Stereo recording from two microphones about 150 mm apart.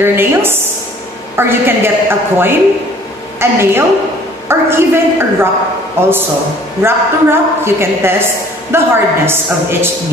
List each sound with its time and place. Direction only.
0.0 s a woman's voice: 15° right (ahead or behind)